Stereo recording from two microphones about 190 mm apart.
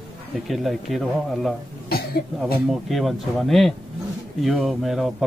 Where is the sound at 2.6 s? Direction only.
Centre (ahead or behind).